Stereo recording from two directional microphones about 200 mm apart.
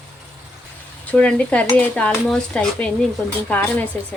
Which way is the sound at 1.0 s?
5° left (ahead or behind).